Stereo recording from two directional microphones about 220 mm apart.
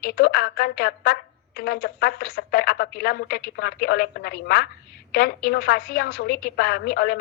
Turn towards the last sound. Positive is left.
turn(degrees=45)  # may be behind; listen again after turning